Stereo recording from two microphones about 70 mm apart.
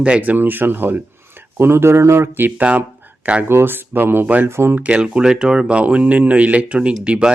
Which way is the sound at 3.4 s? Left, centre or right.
Right.